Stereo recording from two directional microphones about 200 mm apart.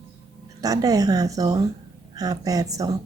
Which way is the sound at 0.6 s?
20° right (ahead or behind).